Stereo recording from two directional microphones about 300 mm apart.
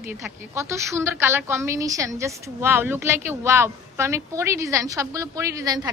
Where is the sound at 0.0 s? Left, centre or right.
Centre.